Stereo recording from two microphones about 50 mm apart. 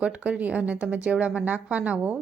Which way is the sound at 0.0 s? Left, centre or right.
Right.